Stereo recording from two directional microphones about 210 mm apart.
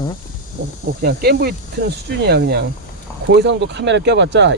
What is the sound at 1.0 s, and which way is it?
Speech, 50° right (ahead or behind).